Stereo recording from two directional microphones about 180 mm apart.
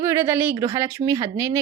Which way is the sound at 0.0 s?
15° right (ahead or behind).